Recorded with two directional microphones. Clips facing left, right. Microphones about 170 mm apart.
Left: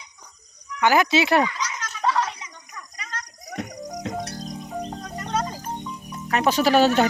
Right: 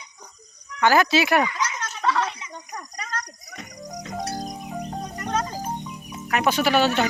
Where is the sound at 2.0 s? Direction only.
15° left (ahead or behind).